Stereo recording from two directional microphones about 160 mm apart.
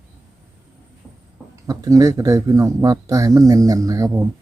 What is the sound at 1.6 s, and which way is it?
Speech, 20° right (ahead or behind).